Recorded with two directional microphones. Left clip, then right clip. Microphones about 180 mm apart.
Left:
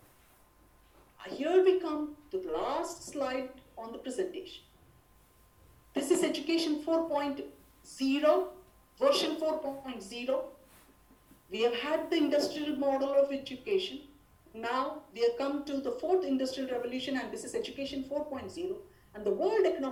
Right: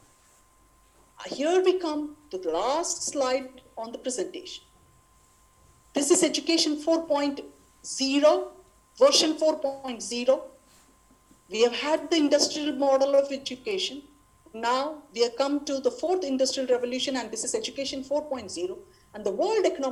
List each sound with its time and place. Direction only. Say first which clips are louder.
1.2 s speech: right 3 dB; 60° right (ahead or behind)
5.9 s speech: right 6 dB; 60° right (ahead or behind)
11.4 s speech: right 7 dB; 60° right (ahead or behind)